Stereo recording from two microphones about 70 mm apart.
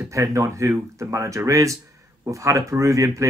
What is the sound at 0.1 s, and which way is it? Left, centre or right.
Speech, right.